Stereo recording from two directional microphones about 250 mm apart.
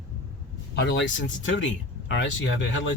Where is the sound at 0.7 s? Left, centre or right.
Left.